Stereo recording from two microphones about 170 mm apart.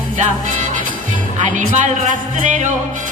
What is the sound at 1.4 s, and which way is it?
Speech, 50° right (ahead or behind).